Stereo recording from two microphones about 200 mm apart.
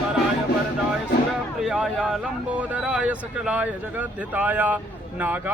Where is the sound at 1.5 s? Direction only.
Centre (ahead or behind).